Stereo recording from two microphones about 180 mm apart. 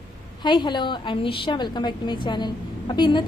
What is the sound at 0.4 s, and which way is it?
A woman's voice, 25° left (ahead or behind).